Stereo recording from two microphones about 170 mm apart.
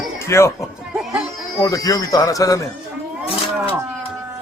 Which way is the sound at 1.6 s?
20° left (ahead or behind).